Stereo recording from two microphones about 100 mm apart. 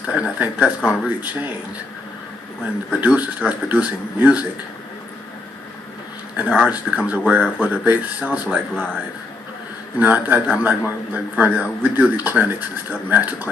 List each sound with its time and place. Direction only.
0.0 s speech: 15° right (ahead or behind)
3.0 s a man's voice: 10° right (ahead or behind)
6.3 s a man's voice: 10° right (ahead or behind)
10.0 s a man's voice: 15° right (ahead or behind)